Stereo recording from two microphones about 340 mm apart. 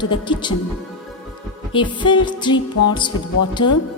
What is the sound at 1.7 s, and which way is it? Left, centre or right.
Music, centre.